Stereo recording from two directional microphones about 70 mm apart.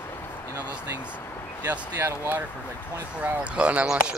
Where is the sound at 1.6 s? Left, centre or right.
Right.